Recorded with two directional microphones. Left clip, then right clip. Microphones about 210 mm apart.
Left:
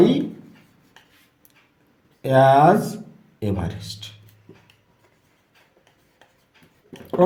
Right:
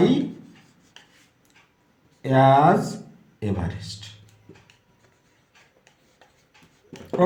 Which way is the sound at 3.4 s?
40° left (ahead or behind).